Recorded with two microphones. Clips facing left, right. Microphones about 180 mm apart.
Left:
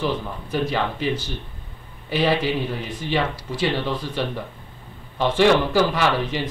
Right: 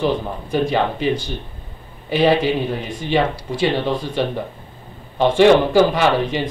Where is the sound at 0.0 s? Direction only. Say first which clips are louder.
Right 5 dB; 25° right (ahead or behind).